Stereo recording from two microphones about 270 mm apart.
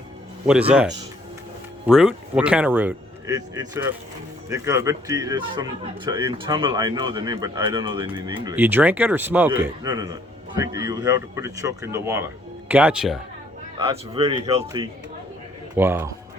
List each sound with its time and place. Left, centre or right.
1.9 s a man's voice: centre
8.4 s a man's voice: centre